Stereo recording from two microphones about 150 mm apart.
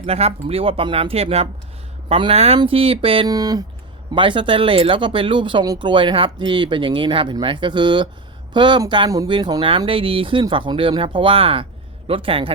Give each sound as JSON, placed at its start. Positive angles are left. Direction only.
{"t": 0.0, "sound": "speech", "side_deg": -45}
{"t": 3.2, "sound": "speech", "side_deg": -25}